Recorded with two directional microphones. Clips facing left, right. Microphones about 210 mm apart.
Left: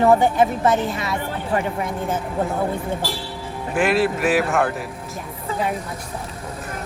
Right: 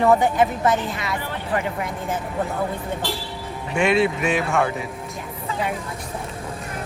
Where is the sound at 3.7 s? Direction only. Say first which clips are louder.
Even; centre (ahead or behind).